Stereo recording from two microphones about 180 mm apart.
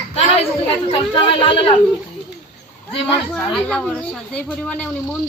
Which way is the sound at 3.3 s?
5° left (ahead or behind).